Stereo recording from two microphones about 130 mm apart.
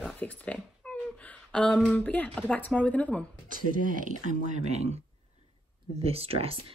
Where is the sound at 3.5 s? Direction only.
90° right; by 4.9 s 60° right (ahead or behind).